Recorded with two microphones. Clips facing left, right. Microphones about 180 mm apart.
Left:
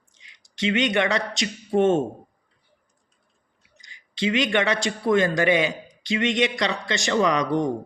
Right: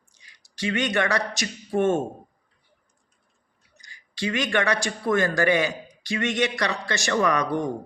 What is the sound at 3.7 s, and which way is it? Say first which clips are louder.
A man's voice: left 3 dB; 20° left (ahead or behind).